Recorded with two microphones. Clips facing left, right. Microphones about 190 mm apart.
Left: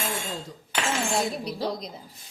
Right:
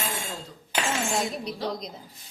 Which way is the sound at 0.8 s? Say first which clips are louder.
Left 2 dB; centre (ahead or behind).